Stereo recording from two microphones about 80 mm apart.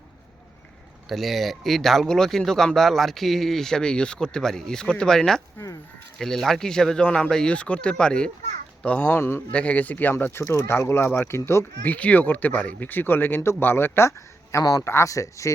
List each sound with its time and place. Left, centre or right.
1.0 s speech: centre
5.5 s speech: left
6.1 s speech: centre; by 9.4 s left
9.5 s speech: centre; by 11.6 s left
11.8 s speech: centre
14.6 s speech: left
14.8 s speech: left